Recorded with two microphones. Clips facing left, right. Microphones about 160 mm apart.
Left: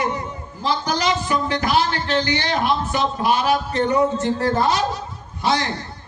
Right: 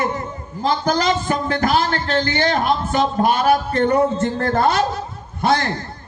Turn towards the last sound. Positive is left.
turn(degrees=-55)  # may be behind; listen again after turning